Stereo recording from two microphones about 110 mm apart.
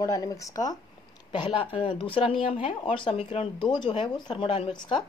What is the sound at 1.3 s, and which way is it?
Speech, 45° left (ahead or behind).